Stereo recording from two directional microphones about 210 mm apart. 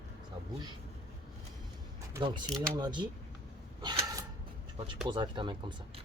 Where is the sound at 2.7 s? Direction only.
20° right (ahead or behind).